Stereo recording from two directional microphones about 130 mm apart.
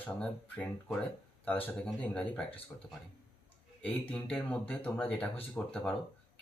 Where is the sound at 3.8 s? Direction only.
10° left (ahead or behind).